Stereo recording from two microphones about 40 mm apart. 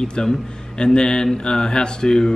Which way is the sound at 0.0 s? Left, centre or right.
Centre.